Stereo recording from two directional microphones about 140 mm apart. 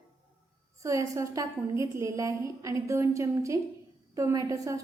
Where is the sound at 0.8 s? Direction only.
20° right (ahead or behind).